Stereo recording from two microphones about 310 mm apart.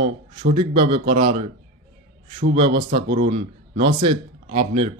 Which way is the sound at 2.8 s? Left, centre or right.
Right.